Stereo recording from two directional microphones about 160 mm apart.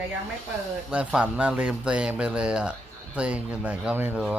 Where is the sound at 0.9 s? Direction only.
10° right (ahead or behind).